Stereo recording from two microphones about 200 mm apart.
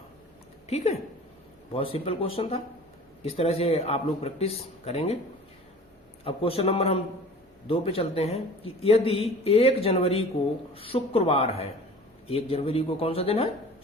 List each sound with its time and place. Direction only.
1.7 s a man's voice: 30° left (ahead or behind)
6.2 s a man's voice: 25° left (ahead or behind)